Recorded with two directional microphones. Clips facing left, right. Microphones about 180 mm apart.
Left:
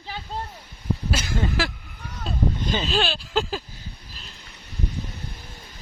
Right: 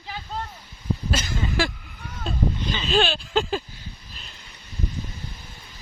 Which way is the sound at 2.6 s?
50° left (ahead or behind).